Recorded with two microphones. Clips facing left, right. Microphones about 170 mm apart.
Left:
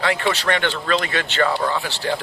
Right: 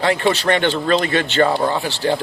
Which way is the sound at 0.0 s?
25° right (ahead or behind).